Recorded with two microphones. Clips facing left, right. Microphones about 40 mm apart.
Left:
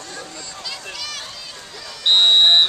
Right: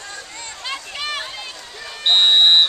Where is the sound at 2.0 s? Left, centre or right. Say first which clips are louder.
Even; centre.